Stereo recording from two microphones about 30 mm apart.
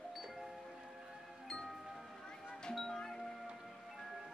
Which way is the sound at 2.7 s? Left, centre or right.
Centre.